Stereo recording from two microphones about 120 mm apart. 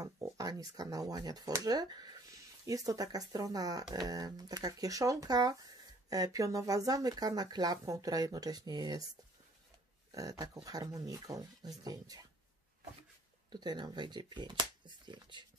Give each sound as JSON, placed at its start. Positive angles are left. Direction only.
{"t": 0.0, "sound": "speech", "side_deg": -30}
{"t": 10.1, "sound": "speech", "side_deg": -30}
{"t": 13.5, "sound": "speech", "side_deg": -35}